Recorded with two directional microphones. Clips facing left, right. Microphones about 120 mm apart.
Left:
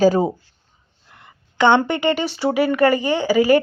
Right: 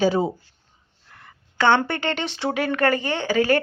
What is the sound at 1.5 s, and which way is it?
Speech, 15° left (ahead or behind).